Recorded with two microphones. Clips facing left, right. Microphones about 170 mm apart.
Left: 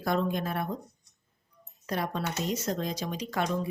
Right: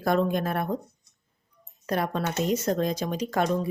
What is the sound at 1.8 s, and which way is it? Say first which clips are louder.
Speech: right 4 dB; 55° right (ahead or behind).